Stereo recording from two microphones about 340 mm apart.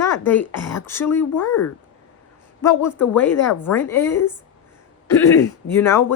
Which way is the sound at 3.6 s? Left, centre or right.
Centre.